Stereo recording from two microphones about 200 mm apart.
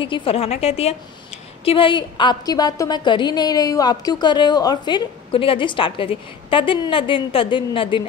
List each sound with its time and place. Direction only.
0.0 s a woman's voice: 25° left (ahead or behind)